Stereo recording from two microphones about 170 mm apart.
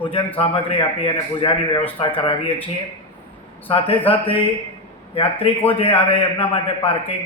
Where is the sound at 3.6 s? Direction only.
30° left (ahead or behind).